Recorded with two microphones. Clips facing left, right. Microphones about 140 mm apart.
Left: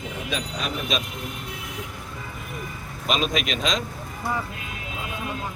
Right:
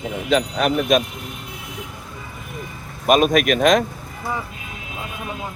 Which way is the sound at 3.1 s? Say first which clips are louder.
Right 10 dB; 55° right (ahead or behind).